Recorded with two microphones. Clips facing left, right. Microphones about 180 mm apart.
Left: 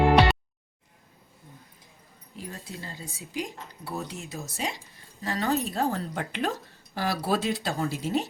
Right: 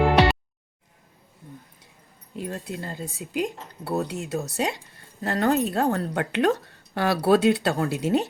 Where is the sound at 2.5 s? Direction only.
60° right (ahead or behind).